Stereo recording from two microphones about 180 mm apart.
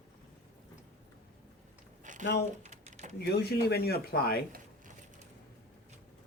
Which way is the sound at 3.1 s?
65° left (ahead or behind).